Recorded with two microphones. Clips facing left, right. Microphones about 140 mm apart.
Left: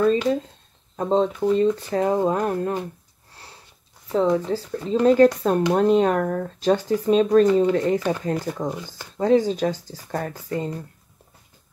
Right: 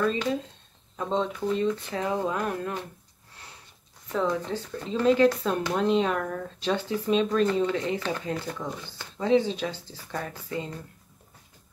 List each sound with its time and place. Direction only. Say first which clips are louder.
0.9 s speech: left 7 dB; 35° left (ahead or behind)
4.1 s speech: left 7 dB; 35° left (ahead or behind)